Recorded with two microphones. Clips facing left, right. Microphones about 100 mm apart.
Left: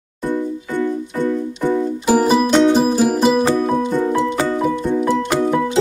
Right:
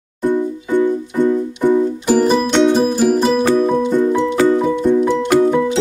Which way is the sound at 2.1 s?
10° left (ahead or behind).